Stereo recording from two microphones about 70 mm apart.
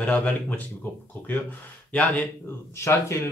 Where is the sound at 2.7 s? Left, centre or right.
Left.